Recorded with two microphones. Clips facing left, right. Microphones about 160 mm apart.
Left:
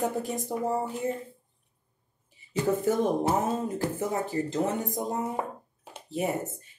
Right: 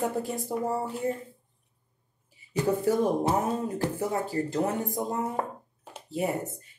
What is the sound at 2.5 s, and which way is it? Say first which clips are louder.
Speech: even; 20° left (ahead or behind).